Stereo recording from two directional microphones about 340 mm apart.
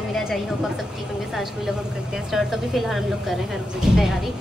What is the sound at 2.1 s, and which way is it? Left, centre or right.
A woman's voice, centre.